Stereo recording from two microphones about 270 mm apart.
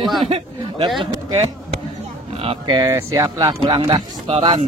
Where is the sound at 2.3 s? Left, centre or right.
Right.